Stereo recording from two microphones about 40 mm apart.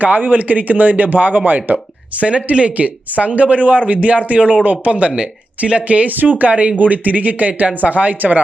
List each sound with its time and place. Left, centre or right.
0.0 s speech: right
6.4 s speech: right